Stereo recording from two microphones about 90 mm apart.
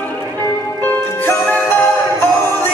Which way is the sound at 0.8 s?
25° left (ahead or behind).